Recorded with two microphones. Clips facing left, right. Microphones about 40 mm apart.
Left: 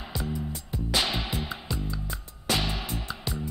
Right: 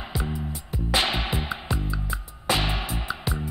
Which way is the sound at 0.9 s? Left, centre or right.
Right.